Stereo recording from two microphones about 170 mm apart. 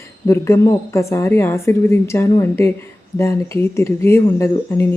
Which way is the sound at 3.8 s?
15° left (ahead or behind).